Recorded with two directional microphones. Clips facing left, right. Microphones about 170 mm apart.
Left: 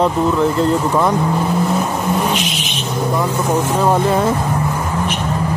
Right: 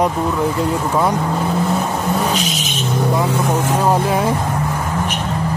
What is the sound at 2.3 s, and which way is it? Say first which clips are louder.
Vehicle: even; 40° right (ahead or behind).